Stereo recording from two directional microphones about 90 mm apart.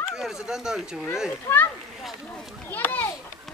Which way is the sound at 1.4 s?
25° left (ahead or behind).